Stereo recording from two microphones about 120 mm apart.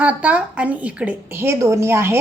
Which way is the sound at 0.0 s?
10° right (ahead or behind).